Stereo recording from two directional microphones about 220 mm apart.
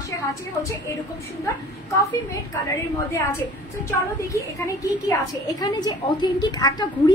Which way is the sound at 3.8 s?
15° left (ahead or behind).